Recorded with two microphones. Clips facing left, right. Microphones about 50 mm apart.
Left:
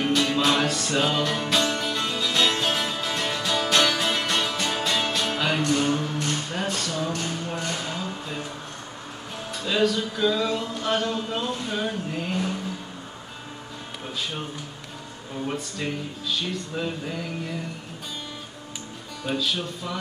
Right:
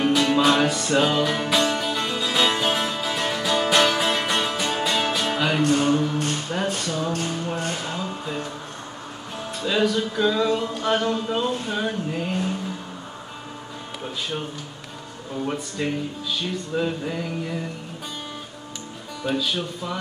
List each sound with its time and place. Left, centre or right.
0.0 s music: centre
5.6 s speech: right
6.1 s music: right
7.5 s speech: right
8.0 s music: centre
9.7 s a sound: centre
11.1 s mantra: centre
11.7 s a sound: centre
15.4 s mantra: centre
19.2 s mantra: centre